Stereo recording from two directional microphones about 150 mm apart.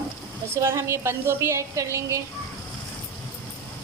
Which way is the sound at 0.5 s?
20° right (ahead or behind).